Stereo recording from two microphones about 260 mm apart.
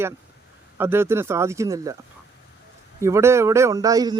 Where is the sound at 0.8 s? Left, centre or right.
Centre.